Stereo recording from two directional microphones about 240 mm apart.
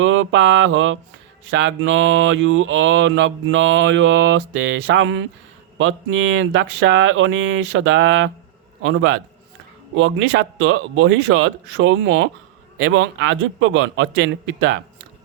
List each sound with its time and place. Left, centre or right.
0.0 s mantra: right